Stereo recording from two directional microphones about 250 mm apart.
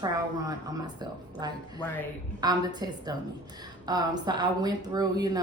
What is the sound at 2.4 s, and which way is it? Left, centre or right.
Speech, centre.